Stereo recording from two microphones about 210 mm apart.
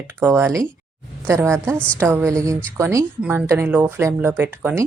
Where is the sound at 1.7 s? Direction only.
5° left (ahead or behind).